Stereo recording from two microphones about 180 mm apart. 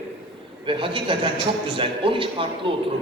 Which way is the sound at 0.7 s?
30° right (ahead or behind).